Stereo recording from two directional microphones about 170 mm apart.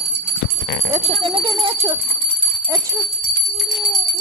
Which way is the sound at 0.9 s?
30° right (ahead or behind).